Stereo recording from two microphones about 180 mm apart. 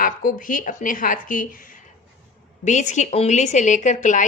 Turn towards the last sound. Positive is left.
turn(degrees=45)  # may be behind; listen again after turning